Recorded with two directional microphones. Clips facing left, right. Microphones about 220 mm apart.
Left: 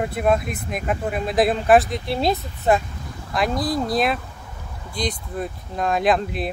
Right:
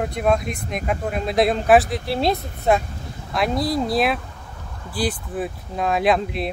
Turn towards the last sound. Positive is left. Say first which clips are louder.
# right 1 dB
turn(degrees=0)  # may be behind; listen again after turning